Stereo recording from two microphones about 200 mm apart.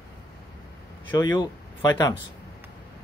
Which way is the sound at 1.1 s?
20° left (ahead or behind).